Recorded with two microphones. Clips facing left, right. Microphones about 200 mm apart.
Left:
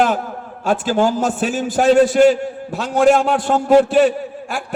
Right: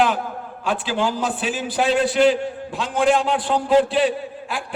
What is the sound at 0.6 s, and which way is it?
A man's voice, 45° left (ahead or behind).